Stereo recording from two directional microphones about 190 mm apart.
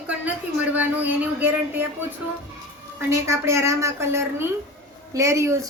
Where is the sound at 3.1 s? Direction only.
15° right (ahead or behind).